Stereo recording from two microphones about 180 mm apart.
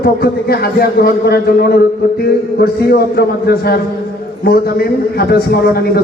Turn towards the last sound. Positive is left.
turn(degrees=60)  # may be behind; listen again after turning